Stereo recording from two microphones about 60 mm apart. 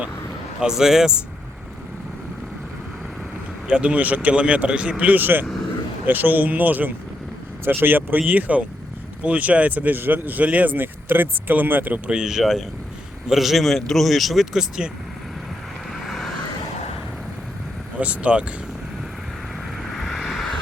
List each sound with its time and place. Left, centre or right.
0.6 s speech: centre
3.7 s speech: centre
12.1 s speech: centre
16.0 s vehicle: centre
18.0 s speech: right
19.9 s vehicle: centre